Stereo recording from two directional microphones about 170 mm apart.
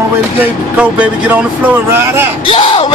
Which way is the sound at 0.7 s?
10° right (ahead or behind).